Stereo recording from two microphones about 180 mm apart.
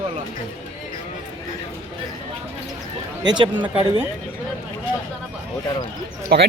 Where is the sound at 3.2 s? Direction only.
25° right (ahead or behind).